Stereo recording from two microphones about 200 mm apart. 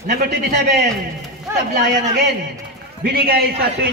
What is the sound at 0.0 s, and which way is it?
Speech, 60° right (ahead or behind).